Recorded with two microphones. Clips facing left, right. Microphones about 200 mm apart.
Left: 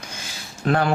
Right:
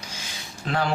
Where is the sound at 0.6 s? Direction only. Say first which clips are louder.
Left 6 dB; 55° left (ahead or behind).